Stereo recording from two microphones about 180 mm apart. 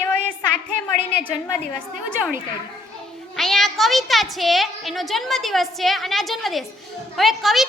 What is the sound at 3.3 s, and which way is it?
A woman's voice, centre (ahead or behind).